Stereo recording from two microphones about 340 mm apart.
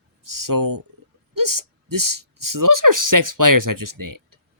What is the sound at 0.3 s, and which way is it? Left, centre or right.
Speech, right.